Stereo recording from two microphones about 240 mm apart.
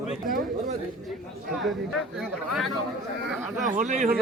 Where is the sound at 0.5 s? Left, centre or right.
Right.